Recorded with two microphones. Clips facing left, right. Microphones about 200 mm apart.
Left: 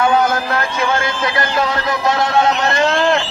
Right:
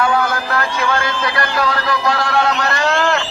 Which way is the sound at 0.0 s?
20° left (ahead or behind).